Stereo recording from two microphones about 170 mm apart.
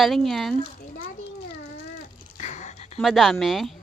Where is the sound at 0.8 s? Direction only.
60° left (ahead or behind).